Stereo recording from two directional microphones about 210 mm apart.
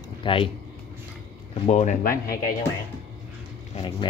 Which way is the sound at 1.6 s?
35° left (ahead or behind).